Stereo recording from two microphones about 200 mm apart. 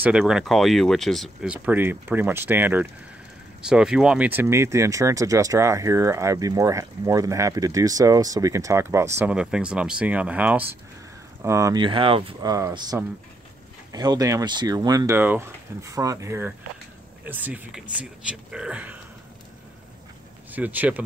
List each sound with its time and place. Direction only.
0.0 s speech: 5° right (ahead or behind)
20.5 s speech: 10° right (ahead or behind)